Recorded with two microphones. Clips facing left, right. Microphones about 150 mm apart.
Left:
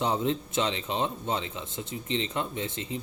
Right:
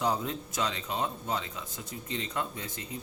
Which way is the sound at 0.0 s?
25° left (ahead or behind).